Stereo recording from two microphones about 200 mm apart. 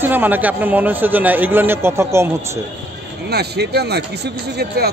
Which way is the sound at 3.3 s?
55° right (ahead or behind).